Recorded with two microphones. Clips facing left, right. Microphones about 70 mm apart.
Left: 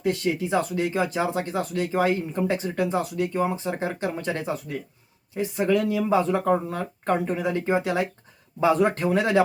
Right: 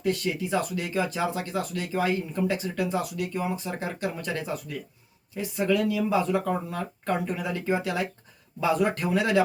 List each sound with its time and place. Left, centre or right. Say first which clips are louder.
0.0 s speech: left 3 dB; left